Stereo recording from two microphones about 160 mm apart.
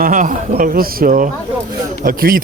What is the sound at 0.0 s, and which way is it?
A man's voice, 55° right (ahead or behind).